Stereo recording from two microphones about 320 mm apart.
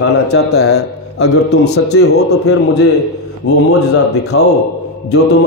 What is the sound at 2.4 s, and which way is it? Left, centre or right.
Speech, left.